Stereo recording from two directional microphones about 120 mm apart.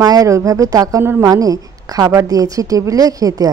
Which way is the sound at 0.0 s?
30° right (ahead or behind).